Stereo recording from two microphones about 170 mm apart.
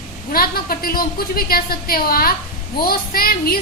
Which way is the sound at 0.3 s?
60° left (ahead or behind).